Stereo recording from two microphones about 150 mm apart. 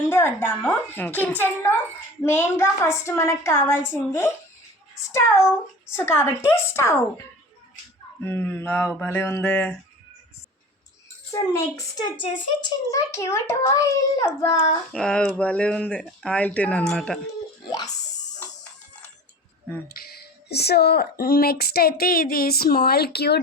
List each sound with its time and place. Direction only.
0.1 s a child's voice: 15° left (ahead or behind)
8.2 s a child's voice: 15° left (ahead or behind)
11.3 s a woman's voice: 20° left (ahead or behind)
14.9 s a child's voice: 5° left (ahead or behind)
17.7 s a woman's voice: 25° left (ahead or behind)
19.9 s speech: 85° left